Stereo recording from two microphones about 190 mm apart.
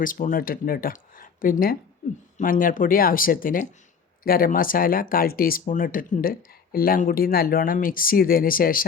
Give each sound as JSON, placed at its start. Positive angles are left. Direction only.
{"t": 0.0, "sound": "speech", "side_deg": 45}